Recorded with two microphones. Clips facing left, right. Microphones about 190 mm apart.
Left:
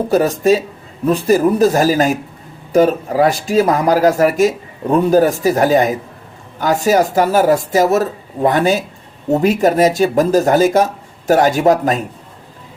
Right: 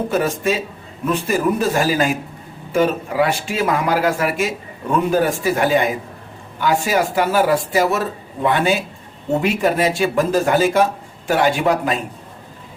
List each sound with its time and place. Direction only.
0.1 s a man's voice: 40° left (ahead or behind)